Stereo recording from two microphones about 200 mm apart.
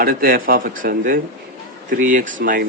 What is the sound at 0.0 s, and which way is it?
Speech, 45° right (ahead or behind).